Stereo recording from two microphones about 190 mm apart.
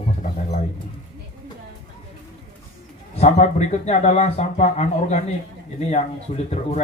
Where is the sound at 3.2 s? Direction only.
40° left (ahead or behind).